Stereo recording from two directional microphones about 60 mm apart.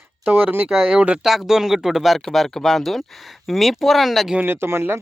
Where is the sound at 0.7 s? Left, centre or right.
Centre.